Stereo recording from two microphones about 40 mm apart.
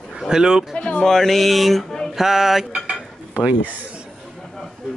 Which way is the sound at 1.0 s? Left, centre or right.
Centre.